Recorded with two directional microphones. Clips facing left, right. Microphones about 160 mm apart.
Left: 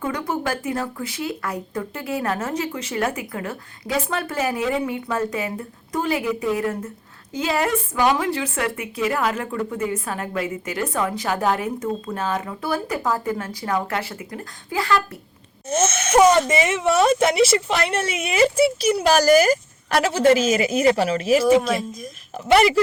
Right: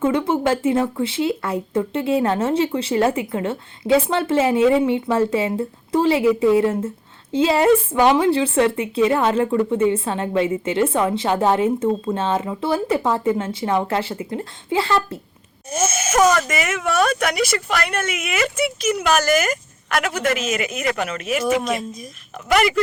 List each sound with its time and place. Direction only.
0.0 s a woman's voice: 25° right (ahead or behind)
15.7 s speech: 10° right (ahead or behind)
16.3 s speech: 30° left (ahead or behind)
21.6 s speech: centre (ahead or behind)
22.4 s speech: 30° left (ahead or behind)